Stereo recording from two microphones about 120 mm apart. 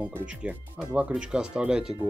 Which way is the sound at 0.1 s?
10° right (ahead or behind).